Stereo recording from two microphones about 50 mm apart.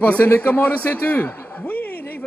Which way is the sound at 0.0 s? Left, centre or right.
Left.